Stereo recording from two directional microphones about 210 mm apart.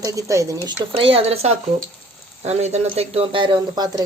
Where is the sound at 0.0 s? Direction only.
15° right (ahead or behind).